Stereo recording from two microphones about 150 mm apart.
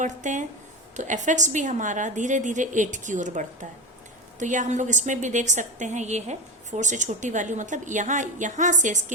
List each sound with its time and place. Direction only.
0.0 s a woman's voice: 55° right (ahead or behind)